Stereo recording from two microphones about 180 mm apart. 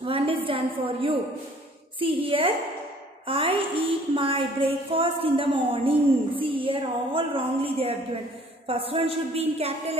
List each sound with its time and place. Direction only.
0.0 s a woman's voice: 30° right (ahead or behind)